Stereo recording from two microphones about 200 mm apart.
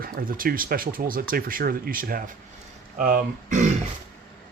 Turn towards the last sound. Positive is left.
turn(degrees=-40)  # may be behind; listen again after turning